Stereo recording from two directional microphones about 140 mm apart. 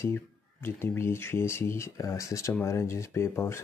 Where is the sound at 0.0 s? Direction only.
15° left (ahead or behind).